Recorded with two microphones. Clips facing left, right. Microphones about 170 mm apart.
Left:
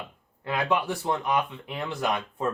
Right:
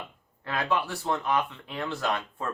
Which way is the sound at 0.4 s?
15° left (ahead or behind).